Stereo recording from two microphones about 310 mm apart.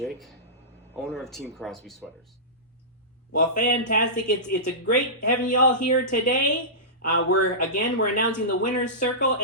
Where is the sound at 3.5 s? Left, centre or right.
Left.